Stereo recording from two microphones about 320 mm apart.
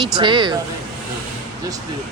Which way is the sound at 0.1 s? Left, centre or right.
Centre.